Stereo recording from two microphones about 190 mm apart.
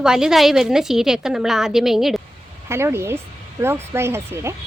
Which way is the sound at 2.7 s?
15° right (ahead or behind).